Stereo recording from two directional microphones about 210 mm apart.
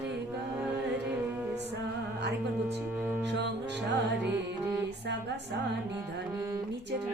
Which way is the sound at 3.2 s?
55° right (ahead or behind).